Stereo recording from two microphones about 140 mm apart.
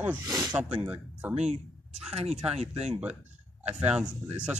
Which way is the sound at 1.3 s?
50° right (ahead or behind).